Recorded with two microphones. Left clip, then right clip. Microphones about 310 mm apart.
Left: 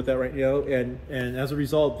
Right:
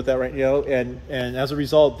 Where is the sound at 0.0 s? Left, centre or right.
Right.